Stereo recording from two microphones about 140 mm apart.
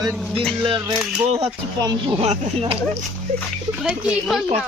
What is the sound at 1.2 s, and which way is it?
Speech, 45° right (ahead or behind).